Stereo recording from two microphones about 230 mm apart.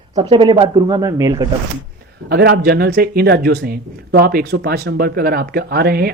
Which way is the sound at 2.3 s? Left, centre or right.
Right.